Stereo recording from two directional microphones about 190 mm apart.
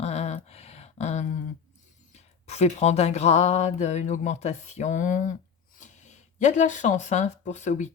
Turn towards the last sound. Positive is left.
turn(degrees=40)  # may be behind; listen again after turning